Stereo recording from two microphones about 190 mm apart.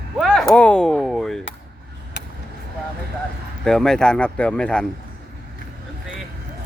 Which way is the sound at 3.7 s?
5° left (ahead or behind).